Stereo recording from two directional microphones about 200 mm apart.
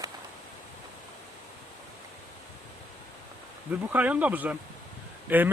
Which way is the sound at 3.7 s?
5° right (ahead or behind).